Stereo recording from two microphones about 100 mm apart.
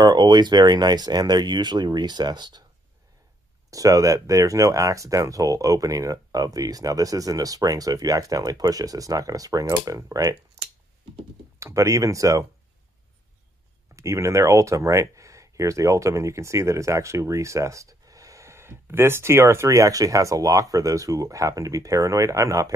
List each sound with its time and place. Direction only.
0.0 s speech: 45° right (ahead or behind)
3.7 s speech: 35° right (ahead or behind)
11.6 s speech: 30° right (ahead or behind)
13.9 s speech: 30° right (ahead or behind)